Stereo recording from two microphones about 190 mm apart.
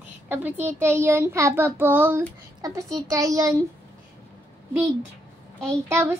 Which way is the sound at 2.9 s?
15° right (ahead or behind).